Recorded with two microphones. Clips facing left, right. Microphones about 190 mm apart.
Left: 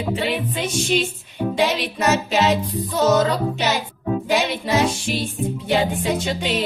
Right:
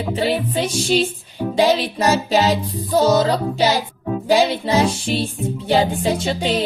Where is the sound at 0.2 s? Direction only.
35° right (ahead or behind).